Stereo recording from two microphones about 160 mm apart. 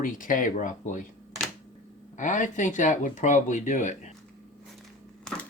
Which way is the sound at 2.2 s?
50° left (ahead or behind).